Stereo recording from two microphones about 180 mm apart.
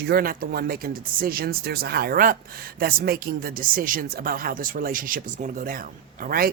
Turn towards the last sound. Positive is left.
turn(degrees=-55)  # may be behind; listen again after turning